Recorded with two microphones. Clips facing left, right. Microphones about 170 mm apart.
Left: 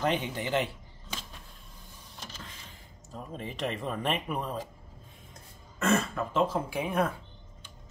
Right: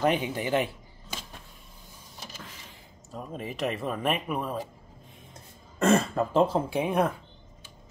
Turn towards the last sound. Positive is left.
turn(degrees=-20)  # may be behind; listen again after turning